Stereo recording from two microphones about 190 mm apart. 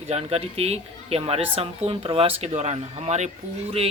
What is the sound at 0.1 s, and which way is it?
Speech, 30° right (ahead or behind).